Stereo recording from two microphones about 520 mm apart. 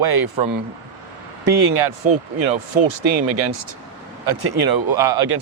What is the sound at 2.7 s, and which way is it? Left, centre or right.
Speech, right.